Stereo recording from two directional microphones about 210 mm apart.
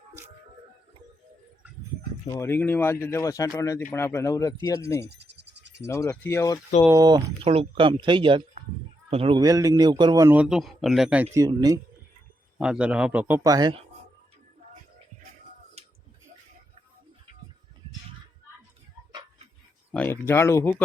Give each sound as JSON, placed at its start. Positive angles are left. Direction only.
{"t": 2.3, "sound": "speech", "side_deg": 10}
{"t": 6.8, "sound": "a man's voice", "side_deg": -15}
{"t": 11.4, "sound": "a man's voice", "side_deg": -20}
{"t": 12.5, "sound": "a man's voice", "side_deg": -5}
{"t": 15.8, "sound": "a sound", "side_deg": -30}
{"t": 19.9, "sound": "a sound", "side_deg": 10}